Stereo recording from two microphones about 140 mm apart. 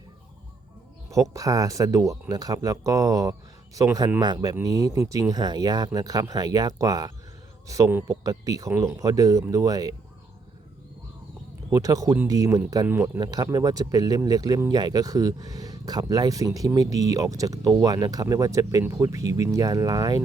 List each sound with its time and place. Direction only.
1.1 s speech: 25° right (ahead or behind)
11.7 s speech: 25° right (ahead or behind)